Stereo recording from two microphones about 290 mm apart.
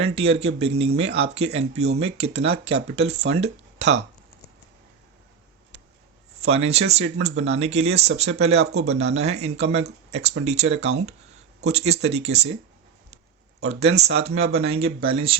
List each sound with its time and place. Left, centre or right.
0.0 s speech: centre
3.3 s speech: right
6.4 s speech: right
13.6 s speech: right
13.9 s speech: right
14.2 s speech: right